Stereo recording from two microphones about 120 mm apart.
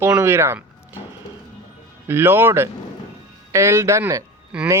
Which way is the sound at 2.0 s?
20° right (ahead or behind).